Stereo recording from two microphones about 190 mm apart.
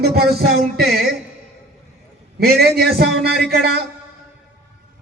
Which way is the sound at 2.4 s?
55° right (ahead or behind).